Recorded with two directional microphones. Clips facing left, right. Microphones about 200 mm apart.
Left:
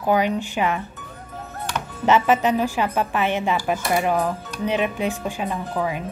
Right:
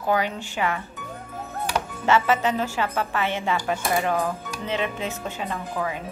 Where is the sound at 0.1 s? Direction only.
20° left (ahead or behind).